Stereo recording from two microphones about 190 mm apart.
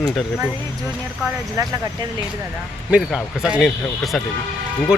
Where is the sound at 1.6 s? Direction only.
15° right (ahead or behind).